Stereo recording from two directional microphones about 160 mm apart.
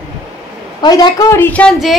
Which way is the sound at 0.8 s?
25° left (ahead or behind).